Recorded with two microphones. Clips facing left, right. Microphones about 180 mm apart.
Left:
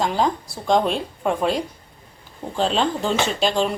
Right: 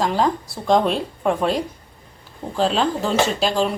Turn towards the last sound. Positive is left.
turn(degrees=0)  # may be behind; listen again after turning